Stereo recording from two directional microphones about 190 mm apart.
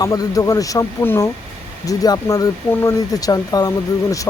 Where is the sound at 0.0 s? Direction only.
20° left (ahead or behind).